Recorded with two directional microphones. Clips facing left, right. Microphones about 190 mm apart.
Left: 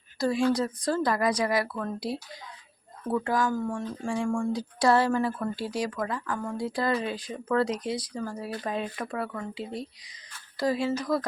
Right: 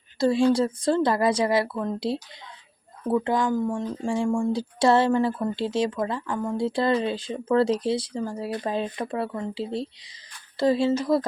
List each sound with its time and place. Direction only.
0.2 s speech: 25° right (ahead or behind)